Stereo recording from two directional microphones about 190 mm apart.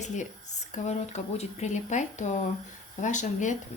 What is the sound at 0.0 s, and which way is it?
Speech, 40° left (ahead or behind).